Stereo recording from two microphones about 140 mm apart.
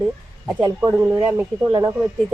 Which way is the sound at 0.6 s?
15° right (ahead or behind).